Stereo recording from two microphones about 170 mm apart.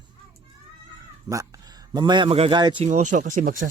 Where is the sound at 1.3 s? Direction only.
20° right (ahead or behind).